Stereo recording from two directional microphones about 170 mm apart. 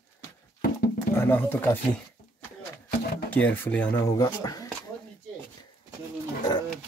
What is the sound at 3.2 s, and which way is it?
Speech, 10° left (ahead or behind).